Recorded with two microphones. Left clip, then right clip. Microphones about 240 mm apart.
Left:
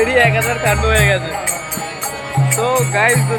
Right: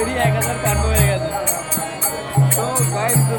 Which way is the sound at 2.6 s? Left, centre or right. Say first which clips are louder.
Left 9 dB; centre.